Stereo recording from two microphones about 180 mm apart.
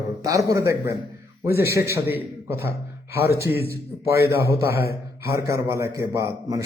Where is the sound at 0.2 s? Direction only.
20° right (ahead or behind).